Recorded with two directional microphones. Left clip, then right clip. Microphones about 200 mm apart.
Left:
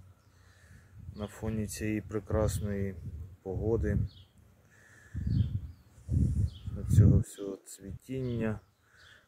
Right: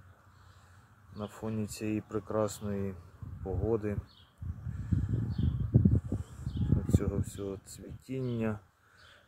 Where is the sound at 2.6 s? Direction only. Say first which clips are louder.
Even; 20° left (ahead or behind).